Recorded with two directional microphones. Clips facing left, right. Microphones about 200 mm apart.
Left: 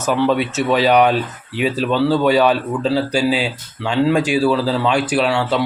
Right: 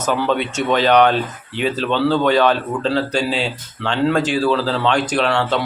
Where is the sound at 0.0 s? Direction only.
5° left (ahead or behind).